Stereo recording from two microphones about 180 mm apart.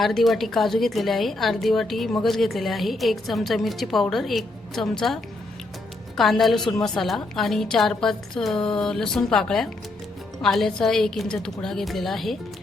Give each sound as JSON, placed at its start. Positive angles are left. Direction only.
{"t": 0.0, "sound": "a woman's voice", "side_deg": 0}